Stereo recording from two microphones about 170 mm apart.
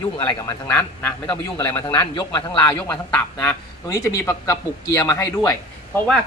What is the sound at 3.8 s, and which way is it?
A man's voice, 20° left (ahead or behind).